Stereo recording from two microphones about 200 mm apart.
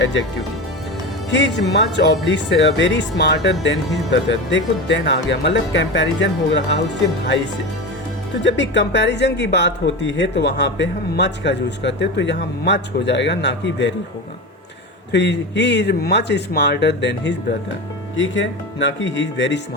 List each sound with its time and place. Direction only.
0.0 s speech: 65° left (ahead or behind)
1.3 s speech: 65° left (ahead or behind)
8.7 s speech: 60° left (ahead or behind)
15.1 s speech: 60° left (ahead or behind)